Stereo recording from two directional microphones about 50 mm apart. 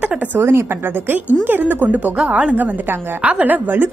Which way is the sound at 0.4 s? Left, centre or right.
Right.